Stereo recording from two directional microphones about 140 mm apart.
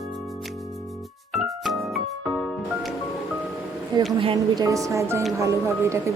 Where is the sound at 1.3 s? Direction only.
Centre (ahead or behind).